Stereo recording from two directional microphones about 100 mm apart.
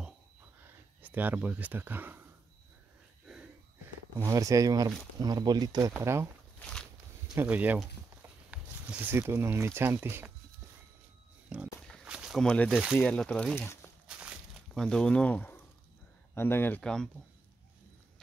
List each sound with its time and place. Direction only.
0.7 s speech: 15° right (ahead or behind)
3.8 s speech: 30° right (ahead or behind)
5.9 s speech: 25° right (ahead or behind)
6.6 s a sound: 10° left (ahead or behind)
7.4 s speech: 15° right (ahead or behind)
8.2 s a sound: 10° right (ahead or behind)
9.1 s speech: 25° right (ahead or behind)
11.4 s a sound: 10° right (ahead or behind)
12.4 s speech: 10° left (ahead or behind)
12.6 s speech: 10° right (ahead or behind)
13.0 s speech: 10° left (ahead or behind)
14.0 s walk: 10° right (ahead or behind)
14.7 s speech: 5° left (ahead or behind); by 16.8 s 20° left (ahead or behind)
16.8 s speech: 5° left (ahead or behind)